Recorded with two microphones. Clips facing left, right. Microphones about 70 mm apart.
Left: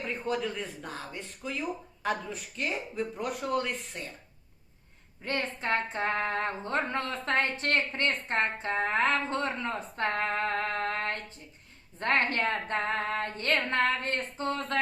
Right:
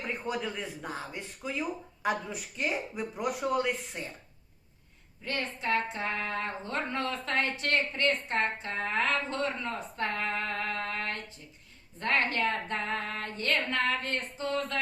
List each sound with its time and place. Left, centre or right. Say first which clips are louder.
0.3 s speech: left 4 dB; centre
5.2 s speech: left 1 dB; left